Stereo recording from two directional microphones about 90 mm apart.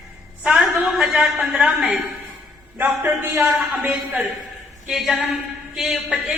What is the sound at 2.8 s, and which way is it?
Speech, 25° right (ahead or behind).